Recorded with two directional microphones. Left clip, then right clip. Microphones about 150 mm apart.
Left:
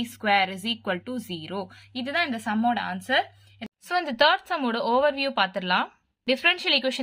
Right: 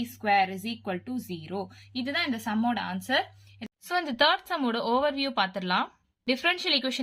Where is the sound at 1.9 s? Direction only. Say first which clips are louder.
Left 3 dB; 20° left (ahead or behind).